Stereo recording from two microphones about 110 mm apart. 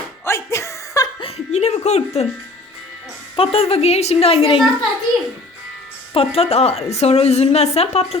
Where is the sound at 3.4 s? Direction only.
60° left (ahead or behind).